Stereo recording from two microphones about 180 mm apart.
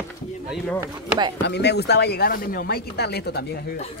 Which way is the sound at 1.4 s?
70° left (ahead or behind).